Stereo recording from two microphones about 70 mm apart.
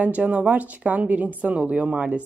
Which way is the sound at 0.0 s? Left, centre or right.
Right.